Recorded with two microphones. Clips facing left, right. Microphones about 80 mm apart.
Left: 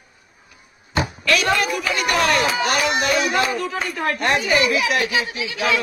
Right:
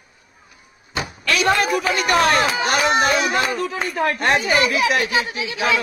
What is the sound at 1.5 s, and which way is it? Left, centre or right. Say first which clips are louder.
Speech: right 2 dB; right.